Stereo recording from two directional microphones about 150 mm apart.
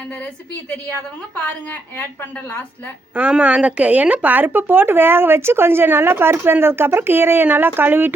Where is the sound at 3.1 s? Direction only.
10° right (ahead or behind).